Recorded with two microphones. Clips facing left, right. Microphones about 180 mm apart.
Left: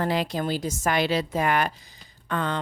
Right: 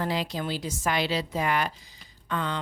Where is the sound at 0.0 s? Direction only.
55° left (ahead or behind).